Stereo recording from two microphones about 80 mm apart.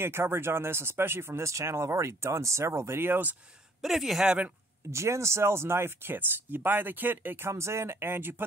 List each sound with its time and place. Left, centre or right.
0.0 s speech: right
3.8 s speech: centre
4.9 s speech: right